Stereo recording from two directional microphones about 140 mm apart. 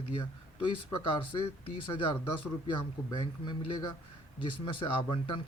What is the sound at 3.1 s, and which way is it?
A man's voice, 30° left (ahead or behind).